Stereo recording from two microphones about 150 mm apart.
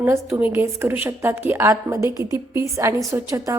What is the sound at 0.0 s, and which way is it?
A woman's voice, 15° right (ahead or behind).